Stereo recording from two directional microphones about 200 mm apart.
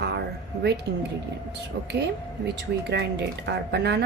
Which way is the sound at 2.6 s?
60° right (ahead or behind).